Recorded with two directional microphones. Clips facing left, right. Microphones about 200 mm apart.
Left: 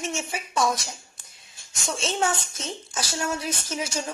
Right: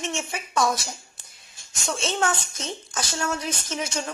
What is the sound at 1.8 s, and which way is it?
Speech, centre (ahead or behind).